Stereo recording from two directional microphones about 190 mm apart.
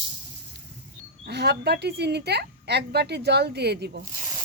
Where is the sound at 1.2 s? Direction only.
60° right (ahead or behind).